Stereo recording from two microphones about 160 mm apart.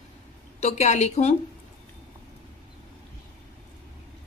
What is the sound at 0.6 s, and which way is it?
Speech, 45° left (ahead or behind).